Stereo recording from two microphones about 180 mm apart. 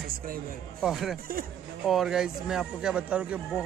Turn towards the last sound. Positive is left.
turn(degrees=-5)  # may be behind; listen again after turning